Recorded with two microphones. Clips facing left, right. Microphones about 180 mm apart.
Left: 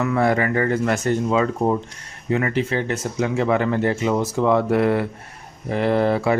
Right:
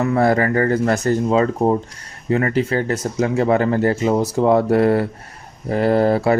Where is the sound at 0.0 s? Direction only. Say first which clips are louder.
Right 3 dB; 35° right (ahead or behind).